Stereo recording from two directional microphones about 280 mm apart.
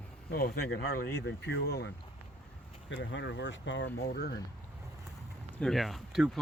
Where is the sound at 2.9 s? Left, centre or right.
Left.